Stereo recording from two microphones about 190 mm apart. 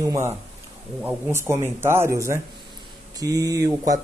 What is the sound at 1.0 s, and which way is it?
Speech, 15° right (ahead or behind).